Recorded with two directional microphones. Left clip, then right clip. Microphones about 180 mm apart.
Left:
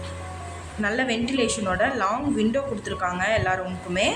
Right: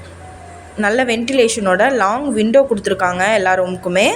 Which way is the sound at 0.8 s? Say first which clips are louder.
Right 9 dB; 50° right (ahead or behind).